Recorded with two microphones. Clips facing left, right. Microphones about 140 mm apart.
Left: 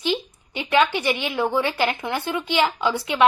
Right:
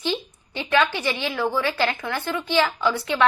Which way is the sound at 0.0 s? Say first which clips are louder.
Left 2 dB; 15° left (ahead or behind).